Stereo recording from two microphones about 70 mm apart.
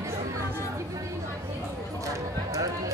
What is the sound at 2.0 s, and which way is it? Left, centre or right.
Speech, right.